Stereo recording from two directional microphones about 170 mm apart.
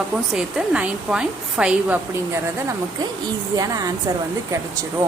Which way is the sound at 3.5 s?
20° right (ahead or behind).